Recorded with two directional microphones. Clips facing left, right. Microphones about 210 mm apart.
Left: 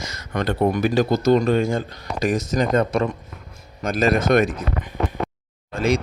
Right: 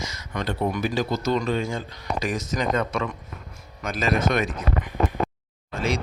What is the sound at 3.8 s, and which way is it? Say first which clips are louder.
Speech: left 5 dB; 50° left (ahead or behind).